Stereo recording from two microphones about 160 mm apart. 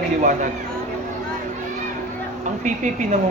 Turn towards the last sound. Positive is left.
turn(degrees=-50)  # may be behind; listen again after turning